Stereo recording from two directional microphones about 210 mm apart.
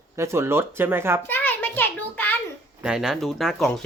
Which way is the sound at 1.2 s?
10° left (ahead or behind).